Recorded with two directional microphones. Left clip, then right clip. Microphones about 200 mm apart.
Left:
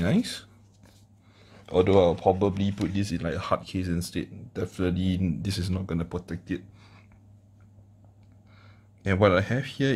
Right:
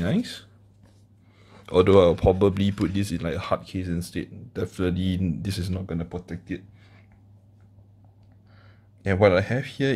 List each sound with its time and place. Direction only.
0.0 s speech: 5° left (ahead or behind)
1.4 s a man's voice: 15° right (ahead or behind); by 2.9 s 30° right (ahead or behind)
2.9 s speech: 15° right (ahead or behind)
5.9 s speech: 15° left (ahead or behind)
9.0 s speech: 5° right (ahead or behind)